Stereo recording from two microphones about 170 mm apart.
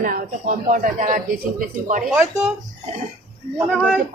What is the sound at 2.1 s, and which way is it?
Speech, 15° right (ahead or behind).